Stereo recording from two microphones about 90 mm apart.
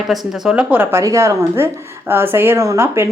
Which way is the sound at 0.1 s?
10° right (ahead or behind).